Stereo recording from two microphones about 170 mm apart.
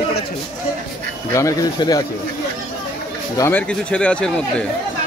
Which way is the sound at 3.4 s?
10° left (ahead or behind).